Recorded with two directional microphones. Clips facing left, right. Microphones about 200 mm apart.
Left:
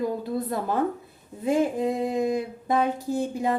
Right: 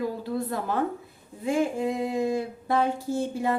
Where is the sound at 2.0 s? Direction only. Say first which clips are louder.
Left 1 dB; 20° left (ahead or behind).